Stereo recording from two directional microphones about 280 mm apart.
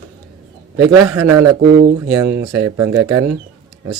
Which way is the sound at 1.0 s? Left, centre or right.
Centre.